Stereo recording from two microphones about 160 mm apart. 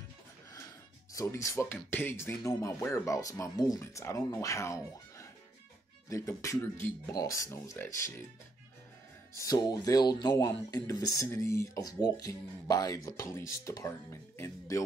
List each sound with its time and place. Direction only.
1.1 s speech: 20° left (ahead or behind)
9.3 s speech: 20° left (ahead or behind)